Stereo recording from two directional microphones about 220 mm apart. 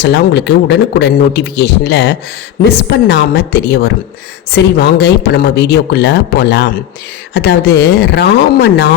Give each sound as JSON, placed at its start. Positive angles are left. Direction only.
{"t": 0.0, "sound": "speech", "side_deg": 50}